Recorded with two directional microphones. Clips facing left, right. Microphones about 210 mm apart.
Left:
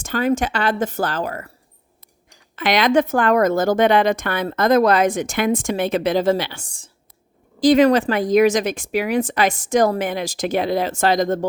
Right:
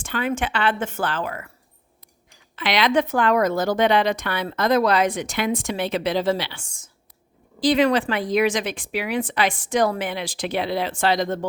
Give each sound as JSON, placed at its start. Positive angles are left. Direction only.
{"t": 0.0, "sound": "speech", "side_deg": 40}
{"t": 2.6, "sound": "speech", "side_deg": 45}
{"t": 7.6, "sound": "speech", "side_deg": 45}